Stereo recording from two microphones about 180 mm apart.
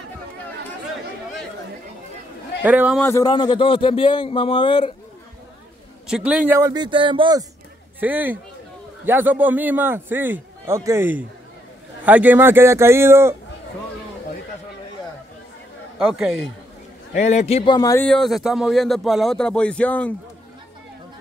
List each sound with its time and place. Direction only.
2.6 s a man's voice: 10° right (ahead or behind)
3.0 s a man's voice: 15° left (ahead or behind)
6.0 s a man's voice: 5° right (ahead or behind); by 7.4 s 25° right (ahead or behind)
8.0 s a man's voice: 10° right (ahead or behind)
16.0 s speech: centre (ahead or behind)
17.1 s a man's voice: 40° left (ahead or behind)
17.7 s a man's voice: 20° left (ahead or behind)
18.0 s speech: centre (ahead or behind)